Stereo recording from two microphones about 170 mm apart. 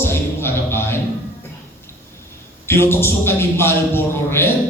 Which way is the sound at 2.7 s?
15° left (ahead or behind).